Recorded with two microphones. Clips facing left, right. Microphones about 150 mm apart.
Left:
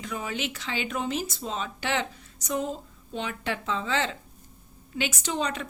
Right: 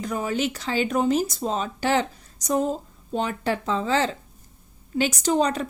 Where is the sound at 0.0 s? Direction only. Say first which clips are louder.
Right 7 dB; 40° right (ahead or behind).